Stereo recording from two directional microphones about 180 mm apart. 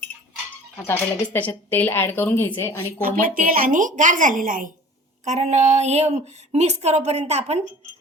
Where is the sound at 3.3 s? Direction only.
50° right (ahead or behind).